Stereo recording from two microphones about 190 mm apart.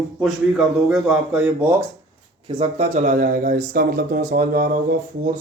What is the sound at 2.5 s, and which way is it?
Speech, 35° right (ahead or behind).